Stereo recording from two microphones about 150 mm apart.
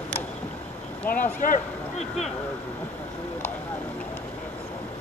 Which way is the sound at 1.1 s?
70° left (ahead or behind).